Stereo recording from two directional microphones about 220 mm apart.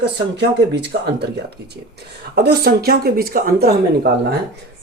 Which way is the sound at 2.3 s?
45° right (ahead or behind).